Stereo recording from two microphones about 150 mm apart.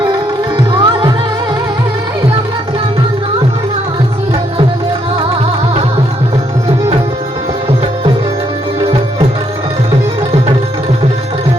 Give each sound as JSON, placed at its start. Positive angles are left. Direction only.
{"t": 0.7, "sound": "music", "side_deg": -35}